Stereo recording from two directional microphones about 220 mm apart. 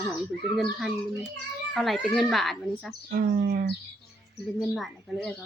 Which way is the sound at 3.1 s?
40° right (ahead or behind).